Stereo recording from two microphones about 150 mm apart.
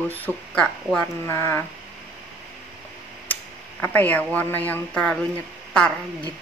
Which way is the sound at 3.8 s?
10° left (ahead or behind).